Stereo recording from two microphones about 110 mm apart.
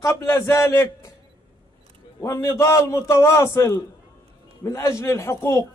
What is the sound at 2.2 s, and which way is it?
A man's voice, 25° left (ahead or behind).